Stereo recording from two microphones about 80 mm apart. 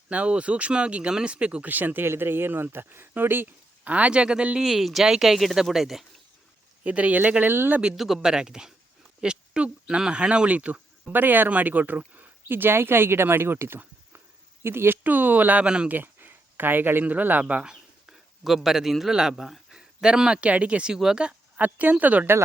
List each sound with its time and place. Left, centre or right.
0.1 s speech: centre
6.8 s speech: centre
7.8 s speech: centre
16.0 s speech: right